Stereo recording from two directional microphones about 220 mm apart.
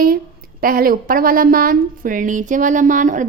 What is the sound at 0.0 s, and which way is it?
A woman's voice, 40° right (ahead or behind).